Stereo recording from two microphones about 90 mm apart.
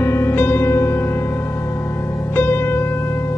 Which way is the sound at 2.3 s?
25° left (ahead or behind).